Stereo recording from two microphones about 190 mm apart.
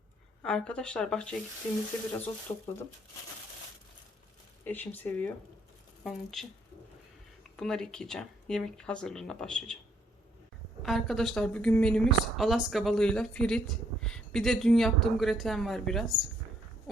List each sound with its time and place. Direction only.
0.4 s a woman's voice: 5° left (ahead or behind)
2.5 s speech: 25° left (ahead or behind)
4.6 s a woman's voice: 10° left (ahead or behind)
7.5 s a woman's voice: centre (ahead or behind)
10.8 s a woman's voice: centre (ahead or behind)